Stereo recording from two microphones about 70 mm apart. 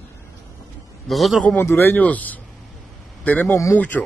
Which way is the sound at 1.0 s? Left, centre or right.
Centre.